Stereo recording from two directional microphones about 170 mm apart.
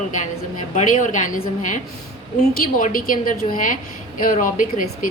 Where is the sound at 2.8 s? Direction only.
55° left (ahead or behind).